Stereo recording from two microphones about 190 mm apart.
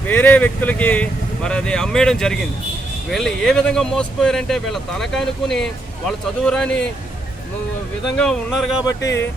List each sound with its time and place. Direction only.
0.1 s speech: 10° left (ahead or behind)
8.1 s speech: 5° left (ahead or behind)
9.0 s speech: 70° left (ahead or behind)